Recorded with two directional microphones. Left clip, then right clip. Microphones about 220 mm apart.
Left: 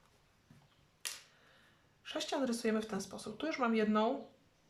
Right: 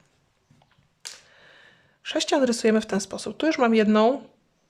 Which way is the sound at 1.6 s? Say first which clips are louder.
Right 14 dB; 45° right (ahead or behind).